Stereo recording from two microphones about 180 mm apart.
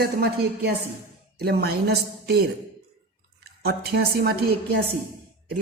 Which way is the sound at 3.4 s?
60° right (ahead or behind).